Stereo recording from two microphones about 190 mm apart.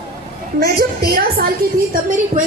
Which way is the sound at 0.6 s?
55° right (ahead or behind).